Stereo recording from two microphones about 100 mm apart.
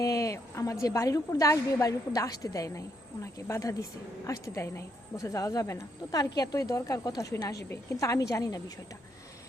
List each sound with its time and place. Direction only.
0.0 s a woman's voice: 30° left (ahead or behind)